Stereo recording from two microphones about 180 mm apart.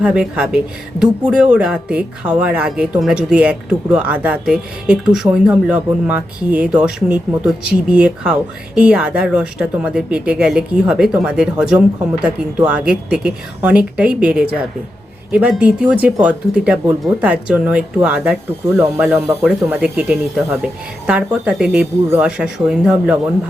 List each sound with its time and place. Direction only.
0.0 s speech: 5° right (ahead or behind)